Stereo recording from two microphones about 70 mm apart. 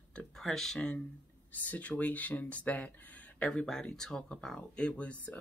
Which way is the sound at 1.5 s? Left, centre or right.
Left.